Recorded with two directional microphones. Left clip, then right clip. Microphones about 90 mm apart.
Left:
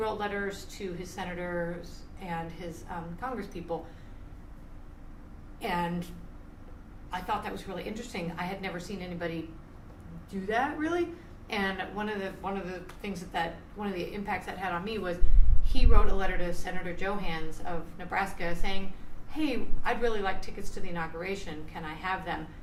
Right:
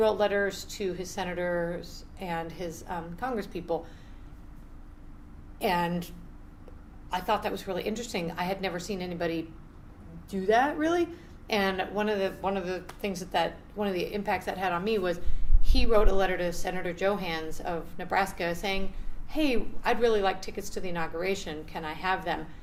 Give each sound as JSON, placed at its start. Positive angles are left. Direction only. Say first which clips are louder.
{"t": 0.0, "sound": "a woman's voice", "louder": "right 7 dB", "side_deg": -40}
{"t": 5.5, "sound": "a woman's voice", "louder": "right 4 dB", "side_deg": -40}
{"t": 7.1, "sound": "a woman's voice", "louder": "right 4 dB", "side_deg": -40}
{"t": 10.4, "sound": "a woman's voice", "louder": "right 5 dB", "side_deg": -40}